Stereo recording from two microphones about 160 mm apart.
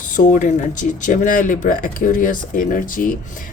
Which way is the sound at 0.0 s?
55° left (ahead or behind).